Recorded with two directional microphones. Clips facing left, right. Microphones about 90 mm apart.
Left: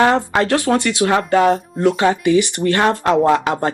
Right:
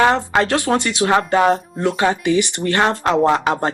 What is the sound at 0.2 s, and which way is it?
Speech, 20° right (ahead or behind).